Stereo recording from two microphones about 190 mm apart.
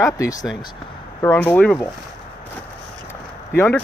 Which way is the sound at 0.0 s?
15° left (ahead or behind).